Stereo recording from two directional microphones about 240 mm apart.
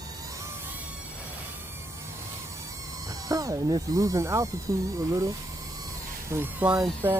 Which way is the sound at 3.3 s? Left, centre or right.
Centre.